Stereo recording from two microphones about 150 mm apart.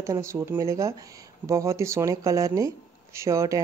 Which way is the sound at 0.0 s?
20° right (ahead or behind).